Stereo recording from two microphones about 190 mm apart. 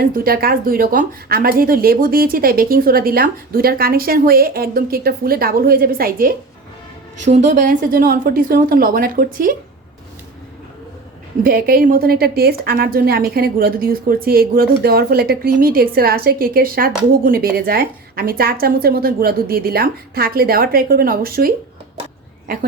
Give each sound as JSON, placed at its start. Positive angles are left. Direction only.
{"t": 0.0, "sound": "a woman's voice", "side_deg": -50}
{"t": 7.3, "sound": "a woman's voice", "side_deg": -40}
{"t": 11.4, "sound": "a woman's voice", "side_deg": -50}